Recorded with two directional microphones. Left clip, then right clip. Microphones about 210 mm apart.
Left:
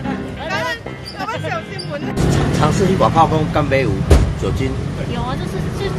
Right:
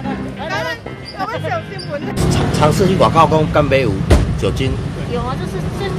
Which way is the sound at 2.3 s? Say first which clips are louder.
Right 3 dB; 35° right (ahead or behind).